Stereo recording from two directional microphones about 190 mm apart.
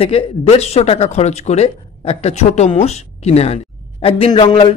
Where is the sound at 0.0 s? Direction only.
30° left (ahead or behind).